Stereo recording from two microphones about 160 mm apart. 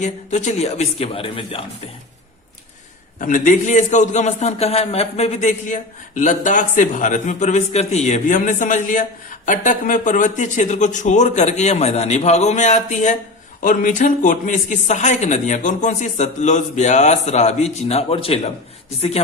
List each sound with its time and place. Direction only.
0.0 s speech: 50° left (ahead or behind)
3.2 s a man's voice: 55° left (ahead or behind); by 18.3 s 35° left (ahead or behind)